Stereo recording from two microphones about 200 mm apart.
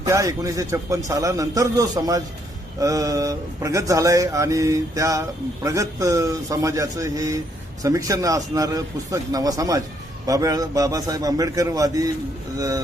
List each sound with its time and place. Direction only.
0.0 s a man's voice: 15° right (ahead or behind)